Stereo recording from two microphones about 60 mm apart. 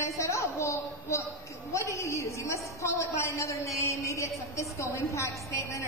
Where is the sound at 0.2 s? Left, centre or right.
Left.